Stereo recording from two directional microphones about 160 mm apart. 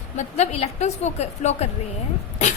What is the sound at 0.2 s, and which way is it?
A woman's voice, 45° left (ahead or behind).